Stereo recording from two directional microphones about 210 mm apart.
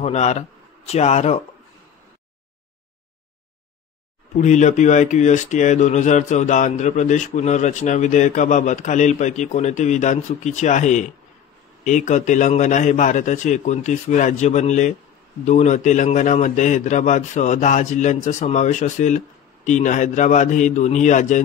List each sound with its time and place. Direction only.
0.0 s a man's voice: 30° left (ahead or behind)
4.4 s speech: 35° left (ahead or behind)